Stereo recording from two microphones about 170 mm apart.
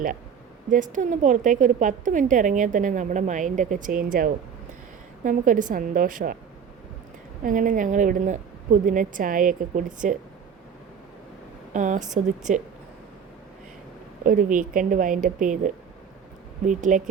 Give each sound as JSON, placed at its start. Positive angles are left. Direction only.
{"t": 0.7, "sound": "a woman's voice", "side_deg": -50}
{"t": 7.4, "sound": "a woman's voice", "side_deg": -50}
{"t": 11.7, "sound": "a woman's voice", "side_deg": -45}
{"t": 14.3, "sound": "a woman's voice", "side_deg": -50}